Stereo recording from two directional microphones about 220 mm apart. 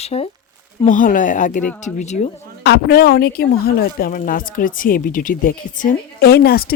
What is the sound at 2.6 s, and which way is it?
Speech, 45° left (ahead or behind).